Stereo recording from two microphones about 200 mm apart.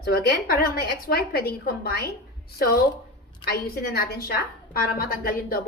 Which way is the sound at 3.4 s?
50° left (ahead or behind).